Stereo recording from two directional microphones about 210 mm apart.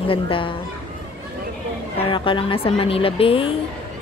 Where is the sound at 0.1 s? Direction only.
25° left (ahead or behind).